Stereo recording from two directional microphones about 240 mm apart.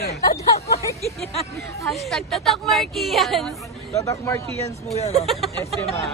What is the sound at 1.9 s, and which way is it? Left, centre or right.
Speech, centre.